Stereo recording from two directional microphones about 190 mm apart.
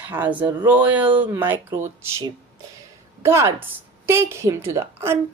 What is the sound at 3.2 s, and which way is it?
A woman's voice, 15° right (ahead or behind).